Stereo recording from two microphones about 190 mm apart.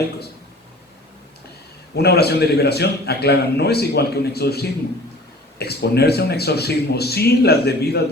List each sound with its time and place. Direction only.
2.0 s a man's voice: 60° left (ahead or behind)